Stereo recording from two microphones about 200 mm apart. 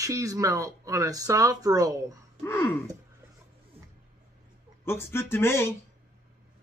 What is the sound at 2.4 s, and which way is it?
Speech, 10° left (ahead or behind).